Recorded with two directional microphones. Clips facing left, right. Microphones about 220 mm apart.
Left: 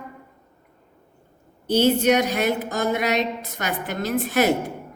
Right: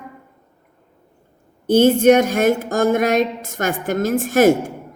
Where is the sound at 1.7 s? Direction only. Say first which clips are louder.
Right 6 dB; 50° right (ahead or behind).